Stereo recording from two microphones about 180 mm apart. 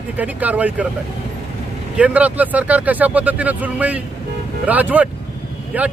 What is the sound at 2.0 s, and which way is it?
A man's voice, 5° right (ahead or behind).